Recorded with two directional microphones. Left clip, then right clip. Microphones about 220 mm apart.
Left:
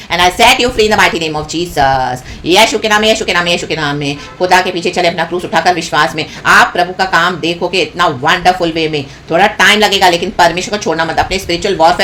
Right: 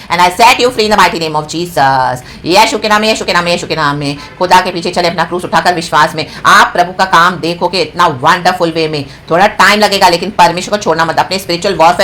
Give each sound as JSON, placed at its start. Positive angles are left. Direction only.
{"t": 0.1, "sound": "a woman's voice", "side_deg": -15}